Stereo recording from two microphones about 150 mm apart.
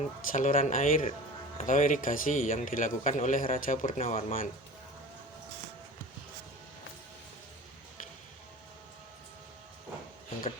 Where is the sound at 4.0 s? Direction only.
40° left (ahead or behind).